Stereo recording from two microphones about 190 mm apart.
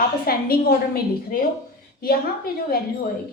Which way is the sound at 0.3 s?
50° left (ahead or behind).